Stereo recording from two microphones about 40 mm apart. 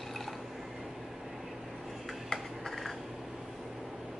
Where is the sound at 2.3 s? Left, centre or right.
Centre.